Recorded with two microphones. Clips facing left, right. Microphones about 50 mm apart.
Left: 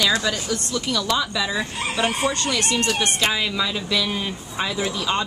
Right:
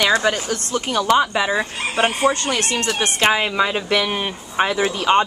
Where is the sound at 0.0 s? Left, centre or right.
Right.